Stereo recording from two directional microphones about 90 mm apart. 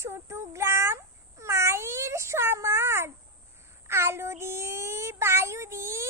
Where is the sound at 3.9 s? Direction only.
30° right (ahead or behind).